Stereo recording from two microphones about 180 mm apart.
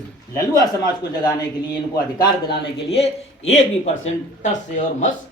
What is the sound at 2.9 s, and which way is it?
Speech, 35° left (ahead or behind).